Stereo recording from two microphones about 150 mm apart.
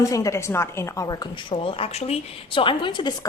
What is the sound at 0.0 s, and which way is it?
A woman's voice, 20° left (ahead or behind).